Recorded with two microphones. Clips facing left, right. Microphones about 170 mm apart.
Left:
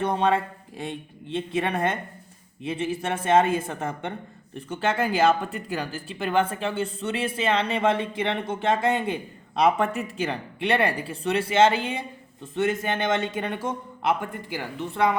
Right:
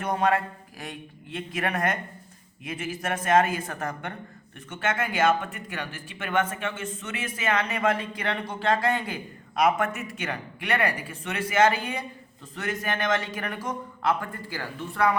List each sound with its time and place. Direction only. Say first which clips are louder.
0.0 s speech: left 2 dB; 25° left (ahead or behind)